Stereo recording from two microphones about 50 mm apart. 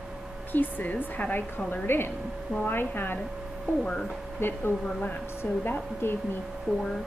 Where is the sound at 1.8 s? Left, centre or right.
Left.